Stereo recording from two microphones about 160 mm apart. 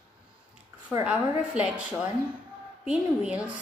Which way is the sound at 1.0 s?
5° right (ahead or behind).